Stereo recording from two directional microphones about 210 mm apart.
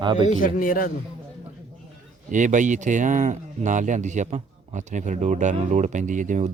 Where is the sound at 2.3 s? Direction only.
35° right (ahead or behind).